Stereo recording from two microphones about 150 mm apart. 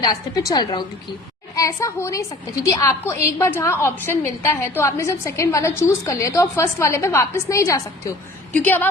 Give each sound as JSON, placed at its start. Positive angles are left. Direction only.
{"t": 0.0, "sound": "a woman's voice", "side_deg": 25}